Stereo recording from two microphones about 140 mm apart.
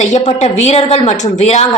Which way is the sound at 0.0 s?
55° left (ahead or behind).